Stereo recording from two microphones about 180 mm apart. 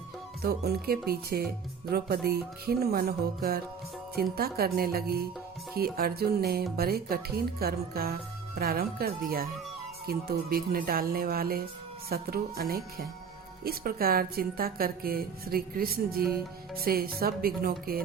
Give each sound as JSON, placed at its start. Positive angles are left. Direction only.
{"t": 0.4, "sound": "a woman's voice", "side_deg": -60}